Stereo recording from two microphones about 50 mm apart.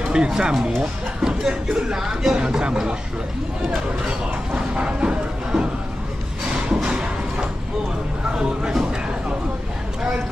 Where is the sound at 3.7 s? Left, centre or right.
Centre.